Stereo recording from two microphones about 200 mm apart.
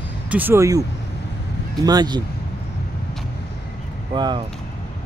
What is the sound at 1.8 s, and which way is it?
Speech, 20° right (ahead or behind).